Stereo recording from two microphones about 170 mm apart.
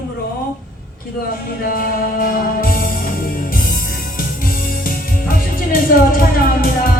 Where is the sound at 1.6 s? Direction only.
55° left (ahead or behind).